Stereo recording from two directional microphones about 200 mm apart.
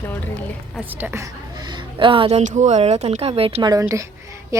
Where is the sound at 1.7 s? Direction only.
25° right (ahead or behind).